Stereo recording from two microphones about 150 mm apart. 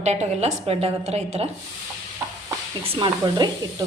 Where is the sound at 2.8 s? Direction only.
35° right (ahead or behind).